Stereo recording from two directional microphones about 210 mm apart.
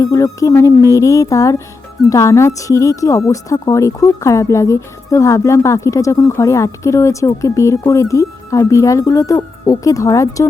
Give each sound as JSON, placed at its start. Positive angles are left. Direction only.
{"t": 0.0, "sound": "speech", "side_deg": 15}